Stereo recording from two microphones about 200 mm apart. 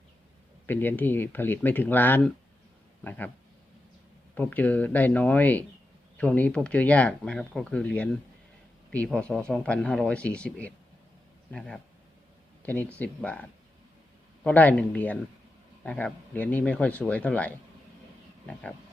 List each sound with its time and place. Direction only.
0.7 s speech: 10° left (ahead or behind)
4.4 s speech: 10° left (ahead or behind)